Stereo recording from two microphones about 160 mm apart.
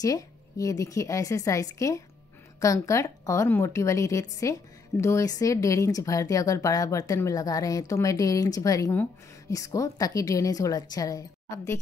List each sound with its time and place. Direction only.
0.0 s speech: 20° left (ahead or behind)